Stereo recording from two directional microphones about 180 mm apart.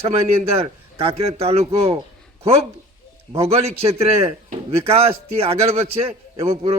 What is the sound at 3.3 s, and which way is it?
A man's voice, 35° right (ahead or behind).